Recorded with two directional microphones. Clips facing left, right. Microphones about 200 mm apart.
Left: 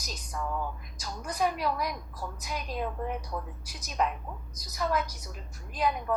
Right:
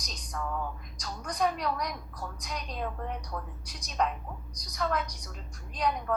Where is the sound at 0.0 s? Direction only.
5° left (ahead or behind).